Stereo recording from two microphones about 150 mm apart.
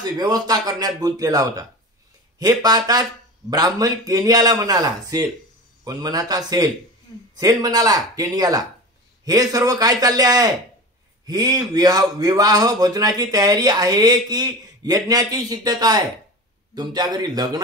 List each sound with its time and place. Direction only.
0.0 s speech: 25° right (ahead or behind)